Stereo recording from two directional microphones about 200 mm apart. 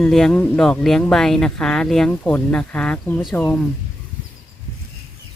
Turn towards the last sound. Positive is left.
turn(degrees=5)  # may be behind; listen again after turning